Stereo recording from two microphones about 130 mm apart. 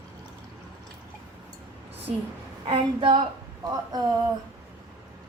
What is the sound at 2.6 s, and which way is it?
Speech, 40° right (ahead or behind).